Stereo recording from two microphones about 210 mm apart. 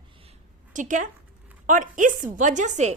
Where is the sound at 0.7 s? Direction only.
35° right (ahead or behind).